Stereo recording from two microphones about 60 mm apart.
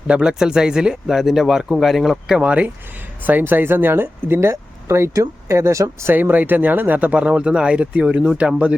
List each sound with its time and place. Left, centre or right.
0.1 s speech: centre
2.4 s speech: right
3.2 s speech: right
5.1 s speech: right
6.1 s speech: right